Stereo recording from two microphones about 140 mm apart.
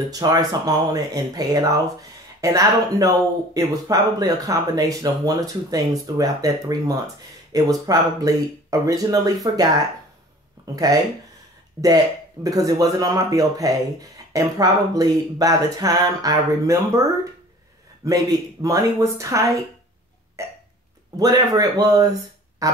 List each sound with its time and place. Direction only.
0.1 s speech: 25° right (ahead or behind)
20.4 s burping: 20° right (ahead or behind)
21.2 s speech: 25° right (ahead or behind)